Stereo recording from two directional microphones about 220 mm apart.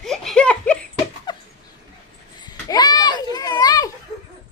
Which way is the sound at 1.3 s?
20° left (ahead or behind).